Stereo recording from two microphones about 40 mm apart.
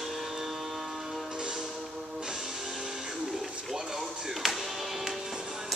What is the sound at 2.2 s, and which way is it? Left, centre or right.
Music, centre.